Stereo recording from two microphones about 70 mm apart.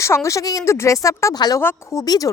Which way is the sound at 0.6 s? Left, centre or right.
Left.